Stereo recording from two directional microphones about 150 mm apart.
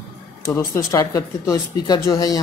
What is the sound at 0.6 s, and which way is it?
Speech, 20° left (ahead or behind).